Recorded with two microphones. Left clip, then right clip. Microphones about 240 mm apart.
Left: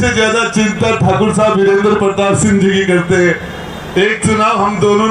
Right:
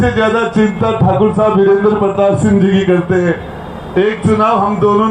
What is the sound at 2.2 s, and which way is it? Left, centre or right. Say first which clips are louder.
Speech: right 1 dB; left.